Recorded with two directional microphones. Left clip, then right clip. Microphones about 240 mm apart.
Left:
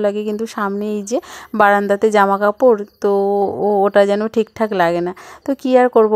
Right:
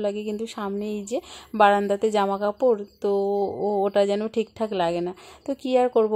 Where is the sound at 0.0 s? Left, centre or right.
Left.